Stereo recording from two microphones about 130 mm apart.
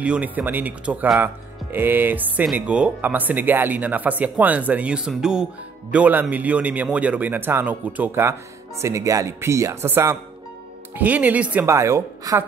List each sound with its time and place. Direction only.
0.0 s speech: 10° right (ahead or behind)
11.7 s speech: 25° right (ahead or behind)